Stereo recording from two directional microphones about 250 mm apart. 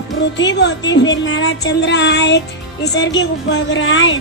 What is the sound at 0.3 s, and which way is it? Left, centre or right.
Music, left.